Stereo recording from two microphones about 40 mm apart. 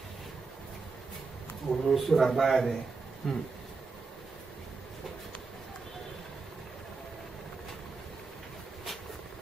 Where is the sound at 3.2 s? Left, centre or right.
Centre.